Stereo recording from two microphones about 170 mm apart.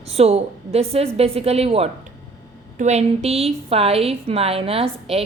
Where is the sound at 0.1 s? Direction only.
35° right (ahead or behind).